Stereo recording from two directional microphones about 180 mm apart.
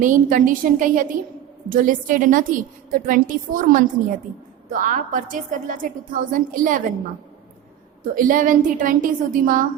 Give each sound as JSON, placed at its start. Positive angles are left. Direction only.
{"t": 0.0, "sound": "a woman's voice", "side_deg": -45}
{"t": 8.1, "sound": "a woman's voice", "side_deg": -50}